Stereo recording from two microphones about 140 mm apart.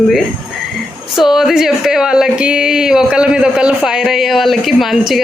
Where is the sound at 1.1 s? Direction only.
5° right (ahead or behind).